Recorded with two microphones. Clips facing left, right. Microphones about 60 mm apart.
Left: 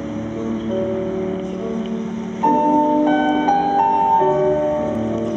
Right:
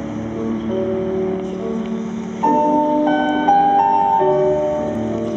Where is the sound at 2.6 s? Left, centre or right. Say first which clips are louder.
Even; centre.